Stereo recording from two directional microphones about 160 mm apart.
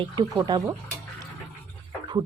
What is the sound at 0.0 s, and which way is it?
Speech, 25° right (ahead or behind).